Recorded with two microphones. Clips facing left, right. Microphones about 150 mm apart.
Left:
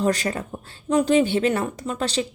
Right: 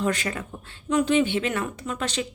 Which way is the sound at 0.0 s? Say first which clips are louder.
Left 4 dB; 35° left (ahead or behind).